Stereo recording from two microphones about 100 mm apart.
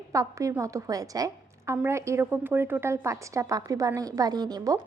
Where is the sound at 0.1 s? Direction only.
35° right (ahead or behind).